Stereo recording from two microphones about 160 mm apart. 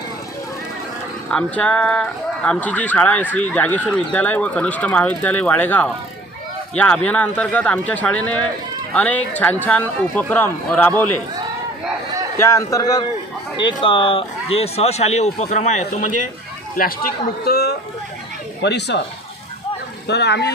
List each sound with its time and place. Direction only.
1.3 s speech: 5° left (ahead or behind)
12.4 s a man's voice: 20° left (ahead or behind); by 17.7 s 75° left (ahead or behind)
18.6 s speech: 90° left
20.1 s speech: 90° left